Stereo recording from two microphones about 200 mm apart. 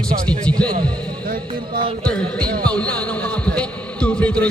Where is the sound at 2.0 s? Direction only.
5° left (ahead or behind).